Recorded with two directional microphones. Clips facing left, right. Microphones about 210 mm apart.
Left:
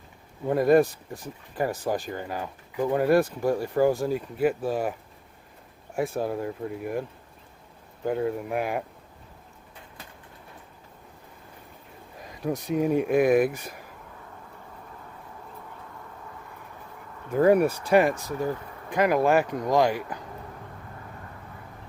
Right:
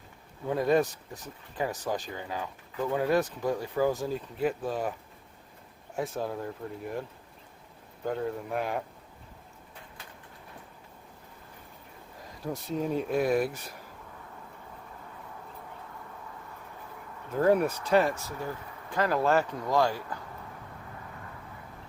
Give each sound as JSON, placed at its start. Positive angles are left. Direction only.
{"t": 0.4, "sound": "speech", "side_deg": 10}
{"t": 6.0, "sound": "speech", "side_deg": 10}
{"t": 8.0, "sound": "speech", "side_deg": 10}
{"t": 12.4, "sound": "speech", "side_deg": 15}
{"t": 17.3, "sound": "speech", "side_deg": 10}